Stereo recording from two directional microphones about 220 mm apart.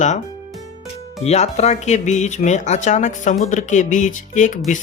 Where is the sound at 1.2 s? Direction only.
30° left (ahead or behind).